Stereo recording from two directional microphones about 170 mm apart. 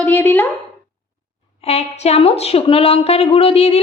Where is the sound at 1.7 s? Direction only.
40° left (ahead or behind).